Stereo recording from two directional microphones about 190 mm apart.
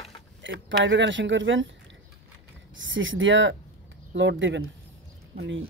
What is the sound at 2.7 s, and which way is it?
Speech, 80° right.